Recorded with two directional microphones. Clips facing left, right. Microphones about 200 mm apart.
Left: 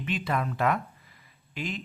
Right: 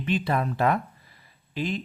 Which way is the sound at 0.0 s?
35° right (ahead or behind).